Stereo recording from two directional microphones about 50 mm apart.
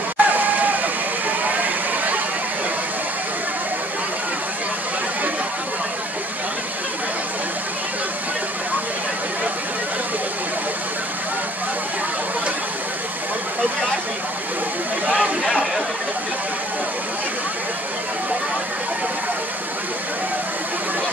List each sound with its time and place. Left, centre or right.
0.2 s a sound: right
1.4 s vehicle: right
15.0 s chatter: right
15.4 s chatter: centre